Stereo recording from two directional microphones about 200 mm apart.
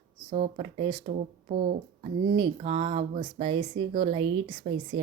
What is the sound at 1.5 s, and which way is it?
Speech, 40° right (ahead or behind).